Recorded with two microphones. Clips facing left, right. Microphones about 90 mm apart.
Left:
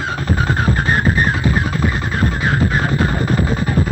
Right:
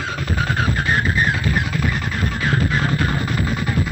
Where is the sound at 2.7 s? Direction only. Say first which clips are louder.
Left 3 dB; 35° left (ahead or behind).